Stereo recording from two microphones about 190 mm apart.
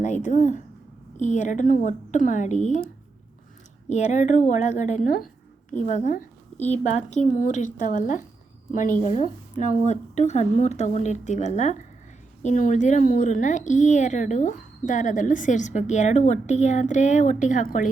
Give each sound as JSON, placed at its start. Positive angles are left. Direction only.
{"t": 0.0, "sound": "speech", "side_deg": 40}
{"t": 3.8, "sound": "speech", "side_deg": 35}